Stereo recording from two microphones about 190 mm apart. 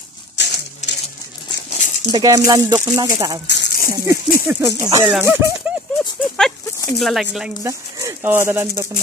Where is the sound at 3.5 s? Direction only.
65° left (ahead or behind).